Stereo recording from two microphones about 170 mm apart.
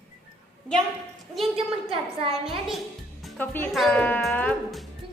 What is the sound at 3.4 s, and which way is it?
Speech, 10° left (ahead or behind).